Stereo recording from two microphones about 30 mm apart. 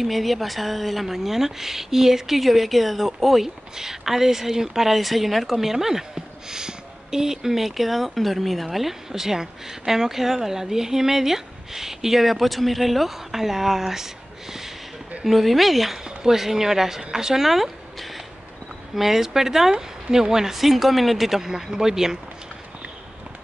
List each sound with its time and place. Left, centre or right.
0.0 s a woman's voice: centre
15.2 s a woman's voice: centre
17.5 s a sound: centre
18.9 s a woman's voice: centre
20.5 s a woman's voice: centre
21.4 s speech: centre